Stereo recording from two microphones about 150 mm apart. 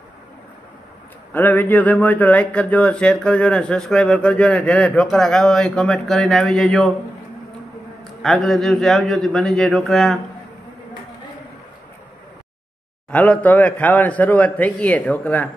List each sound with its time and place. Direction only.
1.3 s speech: 10° left (ahead or behind)
8.0 s a man's voice: centre (ahead or behind)
13.1 s speech: 10° left (ahead or behind)